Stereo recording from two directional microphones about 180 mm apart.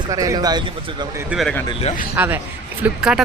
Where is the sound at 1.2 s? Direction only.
5° right (ahead or behind).